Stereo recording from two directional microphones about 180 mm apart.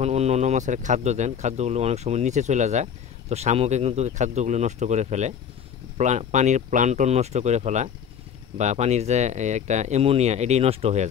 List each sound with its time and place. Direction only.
0.0 s speech: 35° right (ahead or behind)